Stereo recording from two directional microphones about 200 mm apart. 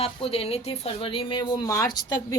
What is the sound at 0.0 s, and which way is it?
Speech, 30° left (ahead or behind).